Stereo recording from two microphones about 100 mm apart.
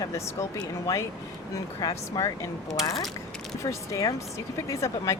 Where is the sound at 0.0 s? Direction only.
35° left (ahead or behind).